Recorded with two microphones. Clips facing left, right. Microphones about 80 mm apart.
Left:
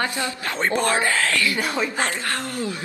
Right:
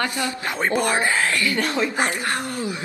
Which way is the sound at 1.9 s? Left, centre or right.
Centre.